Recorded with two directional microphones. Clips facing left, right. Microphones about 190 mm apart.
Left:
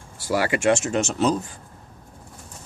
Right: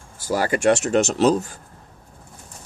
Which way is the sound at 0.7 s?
65° right (ahead or behind).